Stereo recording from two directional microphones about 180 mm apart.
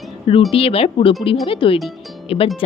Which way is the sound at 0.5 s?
30° left (ahead or behind).